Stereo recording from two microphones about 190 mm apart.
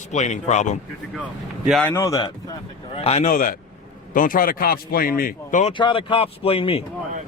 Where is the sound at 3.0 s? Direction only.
35° left (ahead or behind).